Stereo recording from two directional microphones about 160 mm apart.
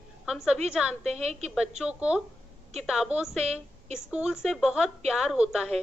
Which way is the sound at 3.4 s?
40° right (ahead or behind).